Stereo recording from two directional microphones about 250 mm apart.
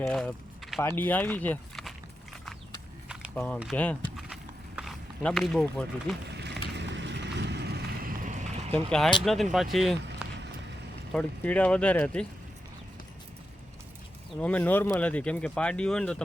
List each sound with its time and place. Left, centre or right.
0.0 s speech: centre
3.1 s walk: centre
4.8 s speech: centre
6.2 s a sound: right
6.7 s run: right
8.7 s speech: centre
11.1 s speech: centre
14.3 s speech: centre